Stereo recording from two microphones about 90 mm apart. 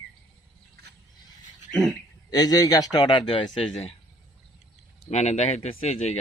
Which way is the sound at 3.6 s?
90° left.